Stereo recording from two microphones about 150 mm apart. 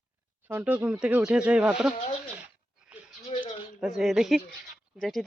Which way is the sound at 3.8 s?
Centre (ahead or behind).